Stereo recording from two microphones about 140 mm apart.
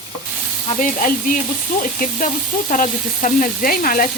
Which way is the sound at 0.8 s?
70° left (ahead or behind).